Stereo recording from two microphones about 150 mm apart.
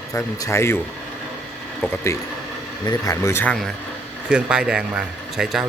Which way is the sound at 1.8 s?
15° left (ahead or behind).